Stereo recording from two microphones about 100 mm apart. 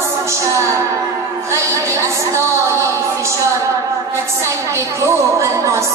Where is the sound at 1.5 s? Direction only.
30° right (ahead or behind).